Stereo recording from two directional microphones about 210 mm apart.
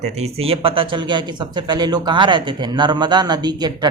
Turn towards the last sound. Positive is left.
turn(degrees=-20)  # may be behind; listen again after turning